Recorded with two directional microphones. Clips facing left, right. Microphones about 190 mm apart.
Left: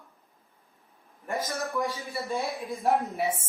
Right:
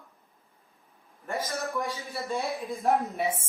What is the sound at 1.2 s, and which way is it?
Speech, 15° left (ahead or behind).